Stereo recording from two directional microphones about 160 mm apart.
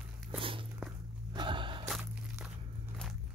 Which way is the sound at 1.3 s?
30° right (ahead or behind).